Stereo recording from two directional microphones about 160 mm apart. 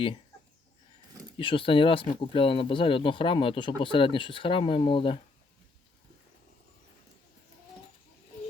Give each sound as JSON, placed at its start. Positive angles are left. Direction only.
{"t": 1.4, "sound": "speech", "side_deg": 35}